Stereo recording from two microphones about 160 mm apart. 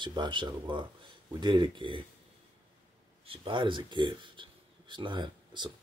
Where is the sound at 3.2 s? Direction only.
35° right (ahead or behind).